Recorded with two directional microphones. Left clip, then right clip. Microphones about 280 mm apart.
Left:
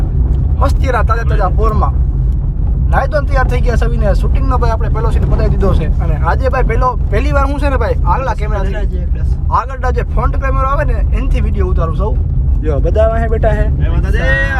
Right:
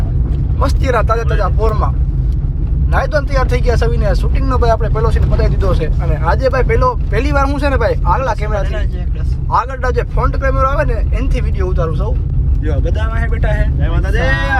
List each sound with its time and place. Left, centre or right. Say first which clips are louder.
0.6 s speech: even; centre
2.9 s speech: left 1 dB; centre
12.9 s speech: left 10 dB; left